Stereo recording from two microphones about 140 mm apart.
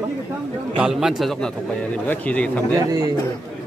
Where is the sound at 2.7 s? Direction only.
25° right (ahead or behind).